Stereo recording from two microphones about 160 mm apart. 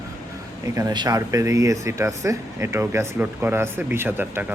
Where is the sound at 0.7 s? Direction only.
20° right (ahead or behind).